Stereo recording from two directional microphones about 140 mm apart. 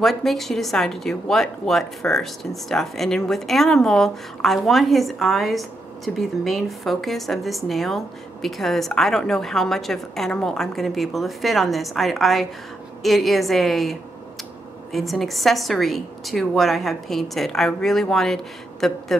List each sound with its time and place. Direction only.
0.0 s speech: centre (ahead or behind)